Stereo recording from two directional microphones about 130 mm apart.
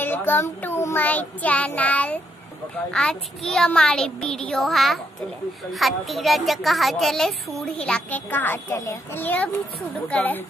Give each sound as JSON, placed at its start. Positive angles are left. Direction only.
{"t": 0.0, "sound": "child singing", "side_deg": 15}
{"t": 2.9, "sound": "speech", "side_deg": 5}
{"t": 10.0, "sound": "child singing", "side_deg": 10}